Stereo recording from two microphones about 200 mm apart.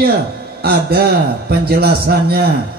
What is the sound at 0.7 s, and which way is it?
A man's voice, 50° right (ahead or behind).